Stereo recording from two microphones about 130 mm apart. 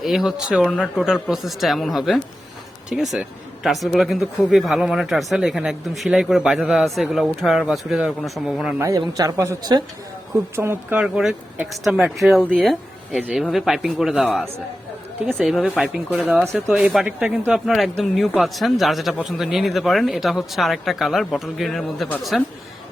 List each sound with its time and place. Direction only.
0.0 s speech: centre (ahead or behind)
9.0 s a woman's voice: 25° right (ahead or behind); by 22.4 s centre (ahead or behind)